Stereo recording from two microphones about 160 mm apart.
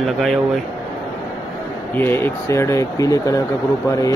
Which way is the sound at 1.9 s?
15° left (ahead or behind).